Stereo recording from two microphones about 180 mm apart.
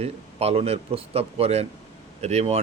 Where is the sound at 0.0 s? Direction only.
35° right (ahead or behind).